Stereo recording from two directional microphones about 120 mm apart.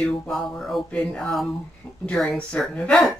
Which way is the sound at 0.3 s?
5° left (ahead or behind).